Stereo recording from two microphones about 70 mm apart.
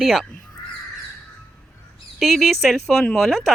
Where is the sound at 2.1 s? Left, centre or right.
Centre.